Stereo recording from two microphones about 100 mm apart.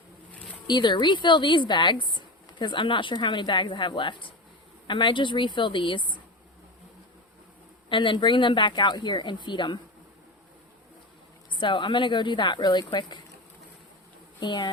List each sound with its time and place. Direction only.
0.7 s speech: 50° left (ahead or behind)
7.9 s speech: 55° left (ahead or behind)
11.5 s speech: 55° left (ahead or behind)
14.3 s speech: 50° left (ahead or behind)